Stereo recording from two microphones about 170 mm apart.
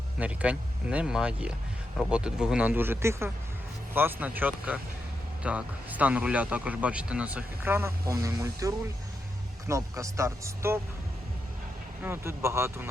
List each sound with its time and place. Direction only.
0.2 s speech: 5° right (ahead or behind)
12.0 s speech: 15° right (ahead or behind)